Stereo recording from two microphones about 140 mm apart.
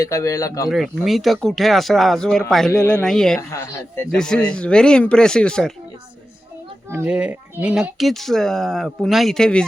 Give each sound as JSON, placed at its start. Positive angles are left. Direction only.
{"t": 0.0, "sound": "speech", "side_deg": 25}
{"t": 1.0, "sound": "speech", "side_deg": 0}
{"t": 3.5, "sound": "speech", "side_deg": 20}
{"t": 4.2, "sound": "speech", "side_deg": 5}
{"t": 6.9, "sound": "speech", "side_deg": -10}